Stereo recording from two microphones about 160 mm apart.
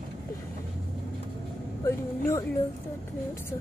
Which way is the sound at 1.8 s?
20° left (ahead or behind).